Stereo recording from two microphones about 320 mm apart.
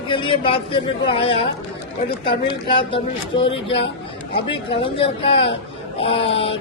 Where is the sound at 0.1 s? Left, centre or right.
Centre.